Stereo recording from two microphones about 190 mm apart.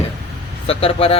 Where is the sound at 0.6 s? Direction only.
30° left (ahead or behind).